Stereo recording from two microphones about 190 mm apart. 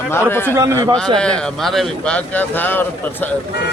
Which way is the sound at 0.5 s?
15° right (ahead or behind).